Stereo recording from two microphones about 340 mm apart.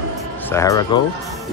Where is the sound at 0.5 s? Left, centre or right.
Centre.